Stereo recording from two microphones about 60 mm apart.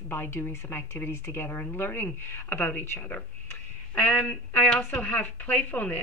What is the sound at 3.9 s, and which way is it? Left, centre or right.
A woman's voice, left.